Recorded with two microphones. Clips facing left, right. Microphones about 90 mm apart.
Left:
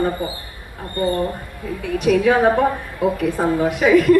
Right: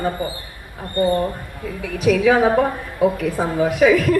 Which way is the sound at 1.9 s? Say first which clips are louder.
Even; centre (ahead or behind).